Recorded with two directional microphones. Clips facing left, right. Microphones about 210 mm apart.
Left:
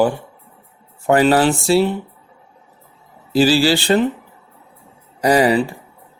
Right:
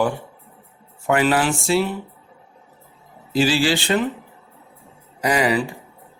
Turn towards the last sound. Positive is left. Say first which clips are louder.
# left 5 dB
turn(degrees=35)  # may be behind; listen again after turning